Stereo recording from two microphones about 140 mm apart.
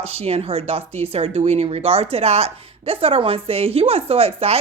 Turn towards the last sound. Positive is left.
turn(degrees=-45)  # may be behind; listen again after turning